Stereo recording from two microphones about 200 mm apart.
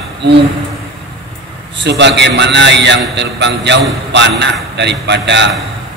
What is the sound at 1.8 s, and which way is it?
A man's voice, 60° right (ahead or behind).